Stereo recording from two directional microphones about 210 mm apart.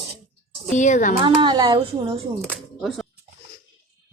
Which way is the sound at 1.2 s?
20° right (ahead or behind).